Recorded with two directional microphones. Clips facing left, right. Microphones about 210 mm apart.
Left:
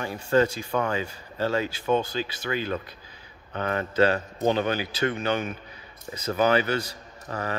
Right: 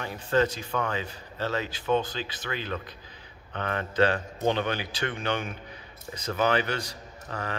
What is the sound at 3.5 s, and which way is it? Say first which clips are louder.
A man's voice: left 3 dB; 40° left (ahead or behind).